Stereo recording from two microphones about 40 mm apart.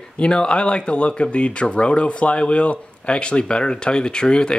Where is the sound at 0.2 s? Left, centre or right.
Left.